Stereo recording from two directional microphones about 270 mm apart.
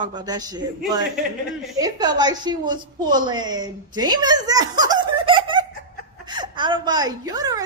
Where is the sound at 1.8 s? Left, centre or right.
Centre.